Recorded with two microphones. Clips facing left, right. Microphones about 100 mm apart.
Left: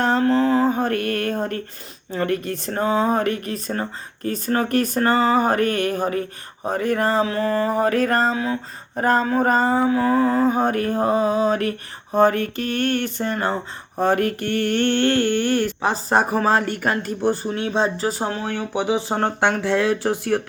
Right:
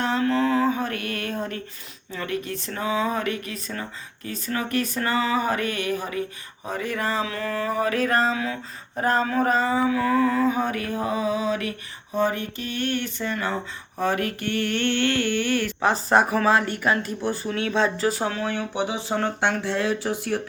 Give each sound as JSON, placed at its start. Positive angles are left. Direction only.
{"t": 0.0, "sound": "speech", "side_deg": 40}
{"t": 12.1, "sound": "speech", "side_deg": 60}
{"t": 14.0, "sound": "a sound", "side_deg": 45}
{"t": 16.8, "sound": "speech", "side_deg": 45}
{"t": 17.5, "sound": "a sound", "side_deg": 30}
{"t": 18.8, "sound": "speech", "side_deg": 45}
{"t": 19.4, "sound": "speech", "side_deg": 60}